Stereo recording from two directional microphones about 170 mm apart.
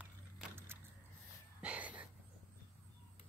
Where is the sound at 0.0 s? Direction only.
10° right (ahead or behind).